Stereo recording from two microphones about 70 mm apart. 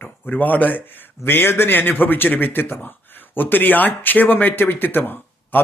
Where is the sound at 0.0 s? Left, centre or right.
Left.